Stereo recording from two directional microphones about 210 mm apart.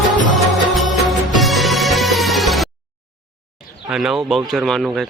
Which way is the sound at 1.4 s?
Centre (ahead or behind).